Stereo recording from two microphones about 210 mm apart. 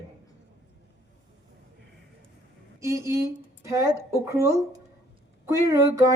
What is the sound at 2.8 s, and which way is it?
A woman's voice, 15° right (ahead or behind).